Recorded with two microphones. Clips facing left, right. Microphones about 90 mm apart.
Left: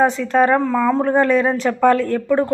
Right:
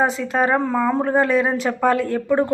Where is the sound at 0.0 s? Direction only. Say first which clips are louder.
Left 4 dB; 5° right (ahead or behind).